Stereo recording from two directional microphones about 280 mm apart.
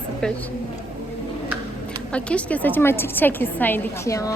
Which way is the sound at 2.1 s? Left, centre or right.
Centre.